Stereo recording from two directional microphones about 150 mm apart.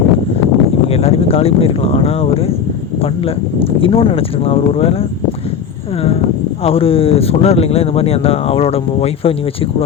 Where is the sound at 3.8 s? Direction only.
35° left (ahead or behind).